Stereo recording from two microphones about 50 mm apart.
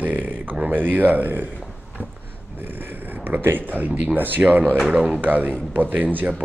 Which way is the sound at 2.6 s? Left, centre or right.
Right.